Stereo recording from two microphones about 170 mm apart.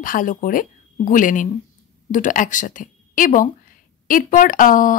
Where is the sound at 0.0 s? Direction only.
50° left (ahead or behind).